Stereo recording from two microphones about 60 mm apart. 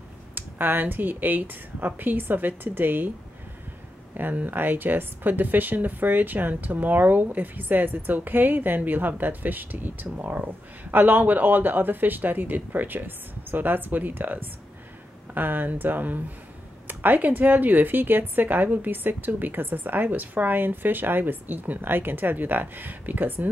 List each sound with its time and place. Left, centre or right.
0.3 s speech: right
4.1 s speech: right